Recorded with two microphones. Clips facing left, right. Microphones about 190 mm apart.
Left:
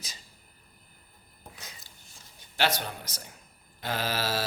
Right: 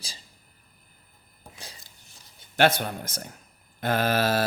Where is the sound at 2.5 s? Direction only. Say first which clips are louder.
Right 7 dB; 55° right (ahead or behind).